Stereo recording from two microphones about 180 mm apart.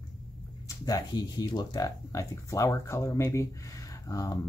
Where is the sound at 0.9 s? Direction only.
20° left (ahead or behind).